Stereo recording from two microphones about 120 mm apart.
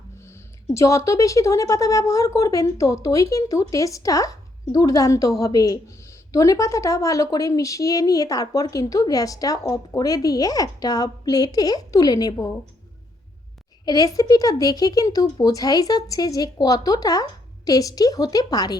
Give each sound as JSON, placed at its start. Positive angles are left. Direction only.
{"t": 0.2, "sound": "speech", "side_deg": 20}
{"t": 13.8, "sound": "speech", "side_deg": 30}